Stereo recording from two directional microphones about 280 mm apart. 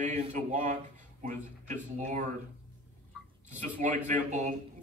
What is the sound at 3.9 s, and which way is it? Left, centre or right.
Speech, right.